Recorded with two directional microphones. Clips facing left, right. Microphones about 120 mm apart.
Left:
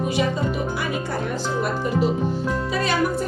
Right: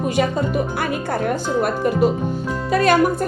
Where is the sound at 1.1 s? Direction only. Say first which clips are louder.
Right 5 dB; 55° right (ahead or behind).